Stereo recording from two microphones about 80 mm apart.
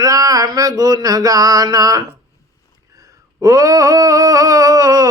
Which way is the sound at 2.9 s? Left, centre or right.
Right.